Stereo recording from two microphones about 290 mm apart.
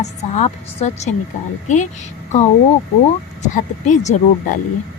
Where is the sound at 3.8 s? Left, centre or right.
Left.